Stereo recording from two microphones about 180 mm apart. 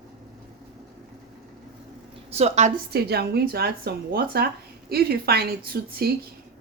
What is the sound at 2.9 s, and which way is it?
A woman's voice, 60° right (ahead or behind).